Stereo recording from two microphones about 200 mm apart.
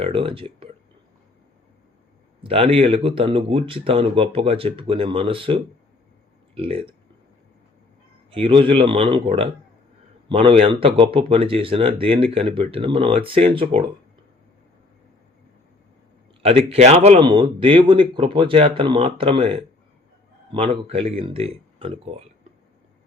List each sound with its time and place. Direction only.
0.0 s speech: 25° right (ahead or behind)
2.4 s speech: 30° right (ahead or behind)
8.3 s speech: 25° right (ahead or behind)
16.4 s speech: 30° right (ahead or behind)